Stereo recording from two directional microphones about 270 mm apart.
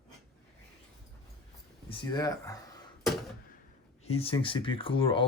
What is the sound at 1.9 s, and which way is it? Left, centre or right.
Speech, centre.